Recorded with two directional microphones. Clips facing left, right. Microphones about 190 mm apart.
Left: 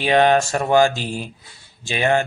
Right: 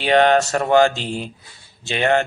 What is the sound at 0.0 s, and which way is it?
Speech, 10° left (ahead or behind).